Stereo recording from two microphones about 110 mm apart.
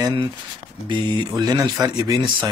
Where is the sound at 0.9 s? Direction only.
45° right (ahead or behind).